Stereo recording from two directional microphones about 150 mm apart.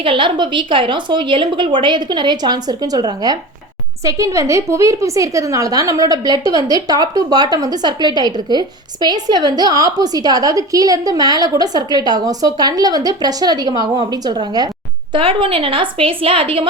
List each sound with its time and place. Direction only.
0.0 s a woman's voice: 35° right (ahead or behind)